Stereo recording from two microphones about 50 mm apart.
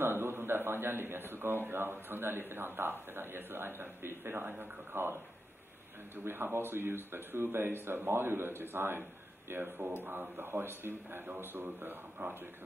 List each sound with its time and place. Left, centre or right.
0.0 s a man's voice: right
6.1 s speech: right